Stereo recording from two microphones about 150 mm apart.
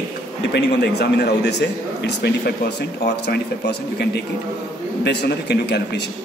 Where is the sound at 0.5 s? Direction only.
90° left.